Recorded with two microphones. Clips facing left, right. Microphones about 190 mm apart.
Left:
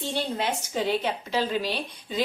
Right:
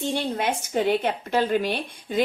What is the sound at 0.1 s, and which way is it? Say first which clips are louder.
A woman's voice: right 1 dB; 55° right (ahead or behind).